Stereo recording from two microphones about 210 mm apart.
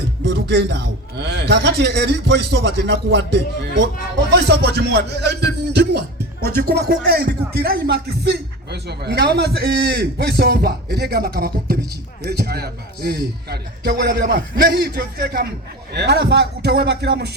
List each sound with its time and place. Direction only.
0.3 s speech: 55° right (ahead or behind)